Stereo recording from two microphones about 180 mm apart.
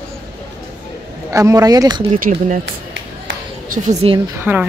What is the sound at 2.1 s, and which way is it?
Speech, 40° right (ahead or behind).